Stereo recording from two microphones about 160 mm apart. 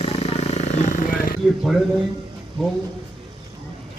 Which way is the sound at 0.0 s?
40° left (ahead or behind).